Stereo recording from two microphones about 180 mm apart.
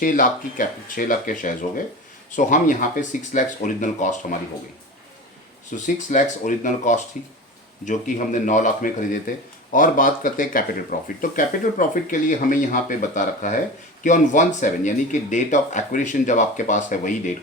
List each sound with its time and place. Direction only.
0.0 s speech: 50° left (ahead or behind)
5.7 s speech: 45° left (ahead or behind)